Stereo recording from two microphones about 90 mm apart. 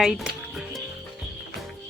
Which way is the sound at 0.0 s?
5° right (ahead or behind).